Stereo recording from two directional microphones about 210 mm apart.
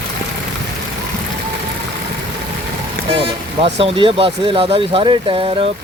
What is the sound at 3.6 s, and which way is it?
Speech, 25° right (ahead or behind).